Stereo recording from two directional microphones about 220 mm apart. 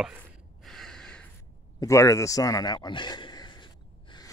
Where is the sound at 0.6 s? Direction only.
Centre (ahead or behind); by 4.2 s 20° left (ahead or behind).